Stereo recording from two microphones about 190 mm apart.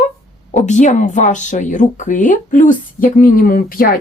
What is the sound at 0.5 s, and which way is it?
Speech, 40° left (ahead or behind).